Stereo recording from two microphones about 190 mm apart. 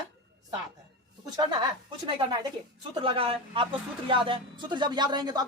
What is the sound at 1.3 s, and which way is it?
Speech, 20° right (ahead or behind).